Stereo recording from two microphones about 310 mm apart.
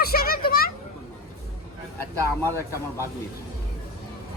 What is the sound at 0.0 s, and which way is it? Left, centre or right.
Children playing, left.